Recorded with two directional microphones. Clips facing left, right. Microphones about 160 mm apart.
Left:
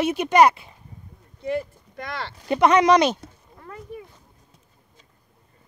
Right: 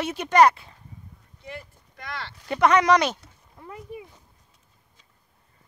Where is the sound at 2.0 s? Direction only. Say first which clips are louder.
Left 4 dB; 35° left (ahead or behind).